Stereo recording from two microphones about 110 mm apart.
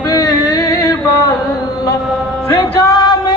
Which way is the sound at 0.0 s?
35° left (ahead or behind).